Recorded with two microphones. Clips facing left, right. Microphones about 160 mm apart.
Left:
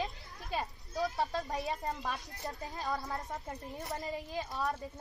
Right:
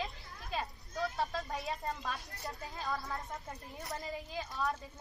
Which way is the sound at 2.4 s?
20° left (ahead or behind).